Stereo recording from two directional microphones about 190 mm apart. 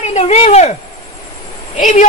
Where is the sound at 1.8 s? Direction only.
40° left (ahead or behind).